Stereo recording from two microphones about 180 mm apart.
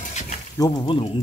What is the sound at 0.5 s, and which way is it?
Speech, 20° left (ahead or behind).